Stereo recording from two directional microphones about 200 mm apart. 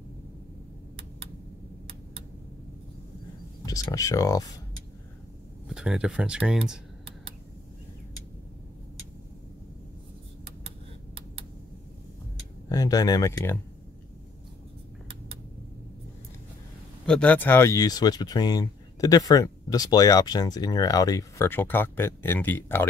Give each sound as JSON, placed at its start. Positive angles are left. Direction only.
{"t": 3.6, "sound": "speech", "side_deg": 15}
{"t": 5.7, "sound": "speech", "side_deg": -5}
{"t": 12.6, "sound": "speech", "side_deg": 20}
{"t": 17.0, "sound": "speech", "side_deg": 5}